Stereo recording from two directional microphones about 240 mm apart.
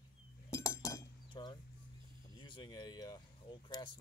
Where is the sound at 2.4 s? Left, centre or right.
Centre.